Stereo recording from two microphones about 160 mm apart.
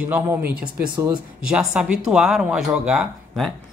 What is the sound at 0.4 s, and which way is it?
Speech, 70° right (ahead or behind).